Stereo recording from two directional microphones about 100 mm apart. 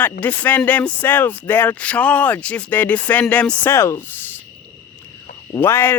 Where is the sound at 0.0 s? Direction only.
15° left (ahead or behind).